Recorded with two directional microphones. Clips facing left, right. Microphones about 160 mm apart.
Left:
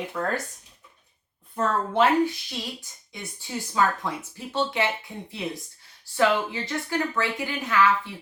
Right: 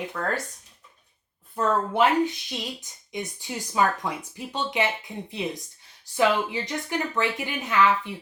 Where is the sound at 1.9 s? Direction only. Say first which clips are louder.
Left 4 dB; 15° right (ahead or behind).